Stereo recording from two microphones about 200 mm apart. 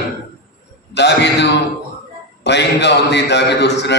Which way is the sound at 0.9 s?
60° left (ahead or behind).